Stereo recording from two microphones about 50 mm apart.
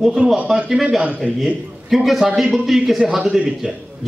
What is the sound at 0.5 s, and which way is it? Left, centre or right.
Speech, centre.